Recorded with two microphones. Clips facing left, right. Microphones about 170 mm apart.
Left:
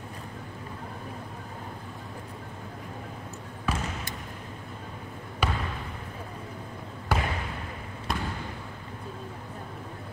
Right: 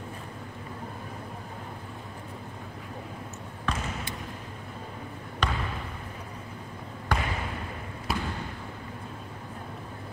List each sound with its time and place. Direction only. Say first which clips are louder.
3.7 s basketball bounce: left 1 dB; 5° left (ahead or behind)
5.4 s basketball bounce: left 1 dB; 10° left (ahead or behind)
7.1 s trickle: left 1 dB; 5° left (ahead or behind)
8.1 s basketball bounce: right 1 dB; 5° right (ahead or behind)